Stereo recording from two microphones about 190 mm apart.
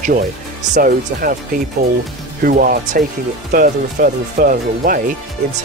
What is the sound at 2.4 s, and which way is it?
Speech, 50° right (ahead or behind).